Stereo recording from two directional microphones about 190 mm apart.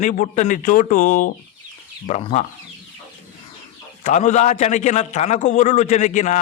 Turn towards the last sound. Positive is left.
turn(degrees=40)  # may be behind; listen again after turning